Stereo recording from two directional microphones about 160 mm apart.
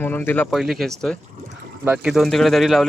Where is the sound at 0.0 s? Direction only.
10° left (ahead or behind).